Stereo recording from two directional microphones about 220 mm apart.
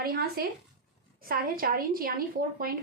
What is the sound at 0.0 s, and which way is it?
A woman's voice, 40° right (ahead or behind).